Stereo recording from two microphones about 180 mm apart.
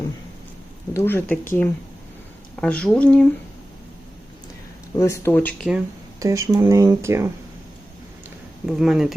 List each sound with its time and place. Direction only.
0.9 s speech: 10° left (ahead or behind)
4.9 s speech: 15° left (ahead or behind); by 5.8 s centre (ahead or behind)
6.1 s speech: 15° right (ahead or behind)
8.6 s speech: centre (ahead or behind)